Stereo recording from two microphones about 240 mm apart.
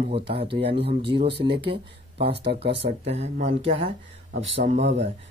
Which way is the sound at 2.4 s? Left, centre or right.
Right.